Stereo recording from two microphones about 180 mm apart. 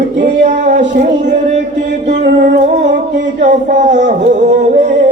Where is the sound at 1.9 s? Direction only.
40° right (ahead or behind).